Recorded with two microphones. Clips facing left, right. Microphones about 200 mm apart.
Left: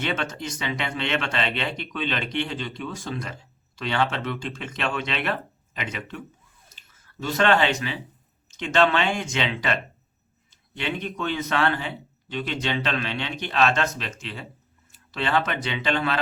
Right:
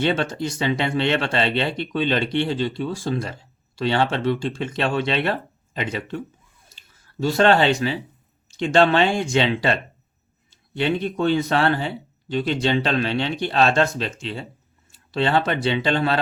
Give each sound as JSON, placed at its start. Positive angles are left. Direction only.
{"t": 0.0, "sound": "speech", "side_deg": -30}
{"t": 6.7, "sound": "a sound", "side_deg": -30}
{"t": 8.4, "sound": "speech", "side_deg": -30}